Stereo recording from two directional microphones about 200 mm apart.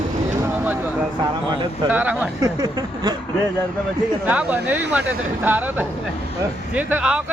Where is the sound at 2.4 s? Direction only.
20° right (ahead or behind).